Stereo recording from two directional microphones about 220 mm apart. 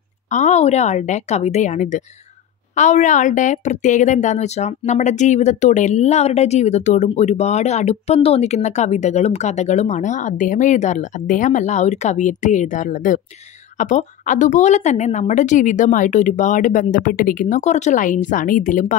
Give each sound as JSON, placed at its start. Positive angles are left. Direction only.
{"t": 0.3, "sound": "a woman's voice", "side_deg": 35}